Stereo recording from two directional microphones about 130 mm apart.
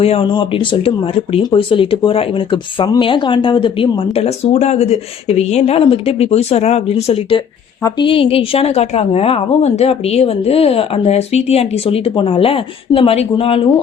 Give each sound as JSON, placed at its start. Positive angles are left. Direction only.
{"t": 0.0, "sound": "speech", "side_deg": 45}
{"t": 7.8, "sound": "a woman's voice", "side_deg": 25}
{"t": 8.0, "sound": "speech", "side_deg": 45}